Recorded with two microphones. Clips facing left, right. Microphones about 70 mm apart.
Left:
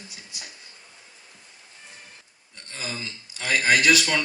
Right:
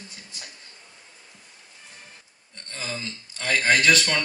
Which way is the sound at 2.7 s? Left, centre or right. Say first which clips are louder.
Right 1 dB; centre.